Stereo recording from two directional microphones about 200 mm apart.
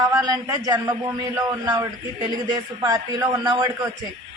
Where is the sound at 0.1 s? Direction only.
20° right (ahead or behind).